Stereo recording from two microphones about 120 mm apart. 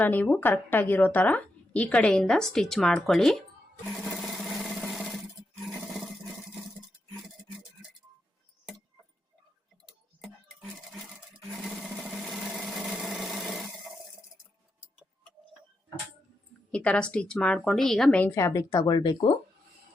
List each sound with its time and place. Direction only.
0.0 s a woman's voice: 15° left (ahead or behind)
3.8 s sewing machine: 5° left (ahead or behind)
5.6 s roar: centre (ahead or behind)
11.5 s sewing machine: centre (ahead or behind)
16.7 s a woman's voice: 10° left (ahead or behind)
18.3 s speech: 25° left (ahead or behind)